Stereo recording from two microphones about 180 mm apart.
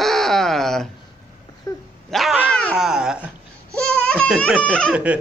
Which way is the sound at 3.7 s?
5° left (ahead or behind).